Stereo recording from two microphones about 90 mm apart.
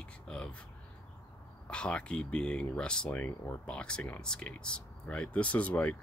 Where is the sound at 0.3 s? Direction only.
10° left (ahead or behind).